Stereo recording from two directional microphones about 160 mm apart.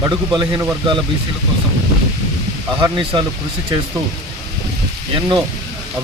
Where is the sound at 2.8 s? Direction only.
30° right (ahead or behind).